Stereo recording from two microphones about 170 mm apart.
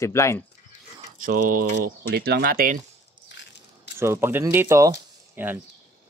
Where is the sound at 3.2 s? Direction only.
90° left.